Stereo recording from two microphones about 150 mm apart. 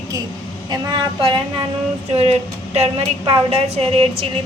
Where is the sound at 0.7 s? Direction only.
30° right (ahead or behind).